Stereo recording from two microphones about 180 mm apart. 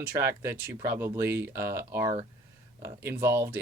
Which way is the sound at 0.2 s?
15° right (ahead or behind).